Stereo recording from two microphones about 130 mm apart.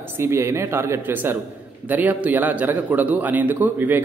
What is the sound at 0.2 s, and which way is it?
A man's voice, 20° right (ahead or behind).